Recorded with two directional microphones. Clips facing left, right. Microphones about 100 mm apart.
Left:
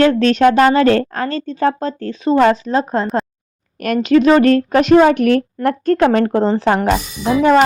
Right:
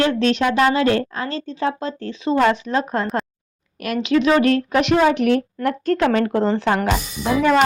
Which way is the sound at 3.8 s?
45° left (ahead or behind).